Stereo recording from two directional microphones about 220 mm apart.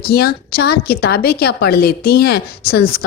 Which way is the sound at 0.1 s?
45° left (ahead or behind).